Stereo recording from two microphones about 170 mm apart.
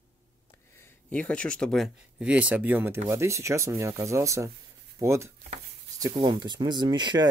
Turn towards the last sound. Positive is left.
turn(degrees=-25)  # may be behind; listen again after turning